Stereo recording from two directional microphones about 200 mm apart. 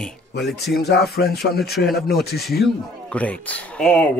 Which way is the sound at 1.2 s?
55° left (ahead or behind).